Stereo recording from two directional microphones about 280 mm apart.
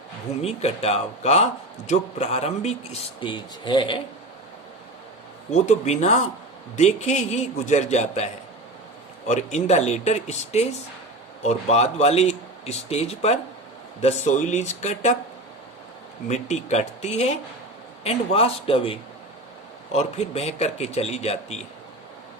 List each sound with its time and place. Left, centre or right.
0.4 s speech: left
5.5 s speech: left
16.3 s speech: left